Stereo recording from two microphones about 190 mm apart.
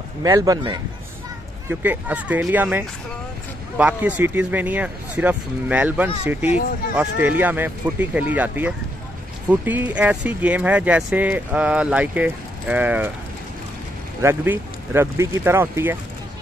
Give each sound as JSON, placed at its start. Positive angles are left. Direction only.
{"t": 0.2, "sound": "speech", "side_deg": -20}
{"t": 14.2, "sound": "speech", "side_deg": -10}